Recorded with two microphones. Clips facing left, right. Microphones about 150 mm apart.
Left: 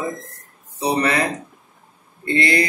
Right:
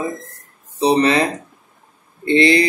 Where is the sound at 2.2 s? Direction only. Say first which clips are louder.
Right 6 dB; 25° right (ahead or behind).